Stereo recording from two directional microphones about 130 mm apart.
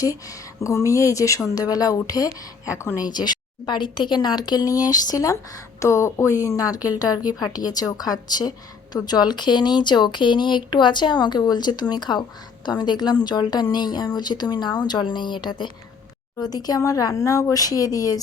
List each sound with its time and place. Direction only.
0.0 s a woman's voice: 25° left (ahead or behind)